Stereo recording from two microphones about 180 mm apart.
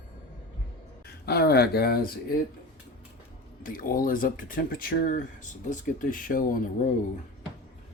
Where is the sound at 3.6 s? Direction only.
50° left (ahead or behind).